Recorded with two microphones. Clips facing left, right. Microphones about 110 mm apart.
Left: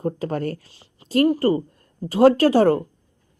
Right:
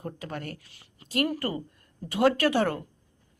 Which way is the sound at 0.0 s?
40° left (ahead or behind).